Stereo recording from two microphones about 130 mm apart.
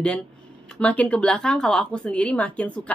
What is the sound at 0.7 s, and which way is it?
A woman's voice, 10° left (ahead or behind).